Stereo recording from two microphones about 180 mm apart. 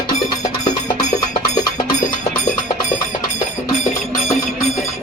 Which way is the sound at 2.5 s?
45° left (ahead or behind).